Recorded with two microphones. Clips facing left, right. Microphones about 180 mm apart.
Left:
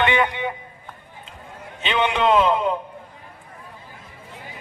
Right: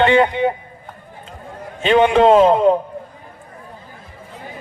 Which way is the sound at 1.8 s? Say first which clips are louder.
Right 9 dB; 40° right (ahead or behind).